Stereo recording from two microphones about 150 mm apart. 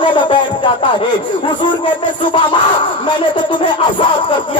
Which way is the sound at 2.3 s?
35° left (ahead or behind).